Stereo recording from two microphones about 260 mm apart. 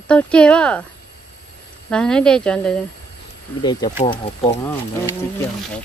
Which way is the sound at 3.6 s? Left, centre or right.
Centre.